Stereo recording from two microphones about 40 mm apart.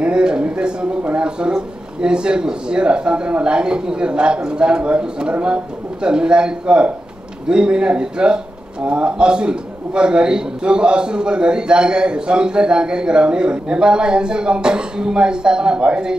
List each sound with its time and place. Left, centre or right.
0.0 s a man's voice: right